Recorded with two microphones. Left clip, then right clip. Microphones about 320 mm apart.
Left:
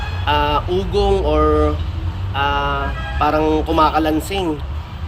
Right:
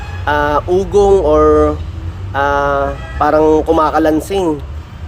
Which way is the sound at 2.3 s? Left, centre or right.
Right.